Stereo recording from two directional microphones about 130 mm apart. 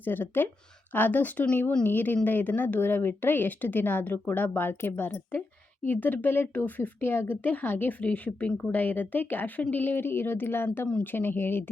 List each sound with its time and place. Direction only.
0.0 s a woman's voice: 15° left (ahead or behind)